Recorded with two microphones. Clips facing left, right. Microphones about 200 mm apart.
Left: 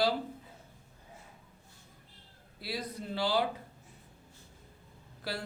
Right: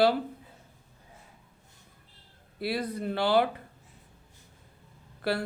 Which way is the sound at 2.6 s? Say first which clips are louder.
Right 8 dB; 60° right (ahead or behind).